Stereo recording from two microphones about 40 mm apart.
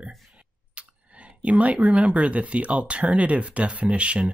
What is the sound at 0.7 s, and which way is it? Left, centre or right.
Speech, right.